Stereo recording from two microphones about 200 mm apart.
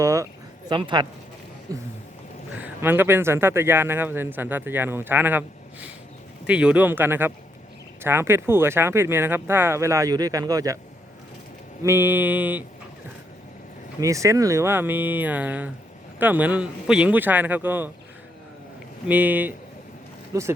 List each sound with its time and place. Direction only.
0.0 s speech: 15° right (ahead or behind)
11.8 s speech: 10° right (ahead or behind)
14.0 s speech: 15° right (ahead or behind)
19.0 s speech: 10° right (ahead or behind)